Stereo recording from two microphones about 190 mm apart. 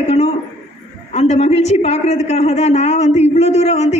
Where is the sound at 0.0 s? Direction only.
35° left (ahead or behind).